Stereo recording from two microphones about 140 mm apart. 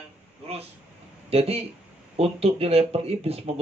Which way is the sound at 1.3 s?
45° right (ahead or behind).